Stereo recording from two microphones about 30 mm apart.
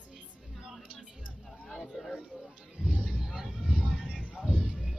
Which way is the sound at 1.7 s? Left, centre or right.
Centre.